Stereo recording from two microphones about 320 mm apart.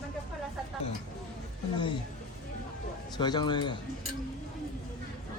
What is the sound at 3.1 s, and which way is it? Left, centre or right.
Speech, centre.